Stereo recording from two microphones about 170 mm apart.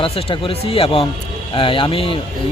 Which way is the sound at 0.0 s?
30° left (ahead or behind).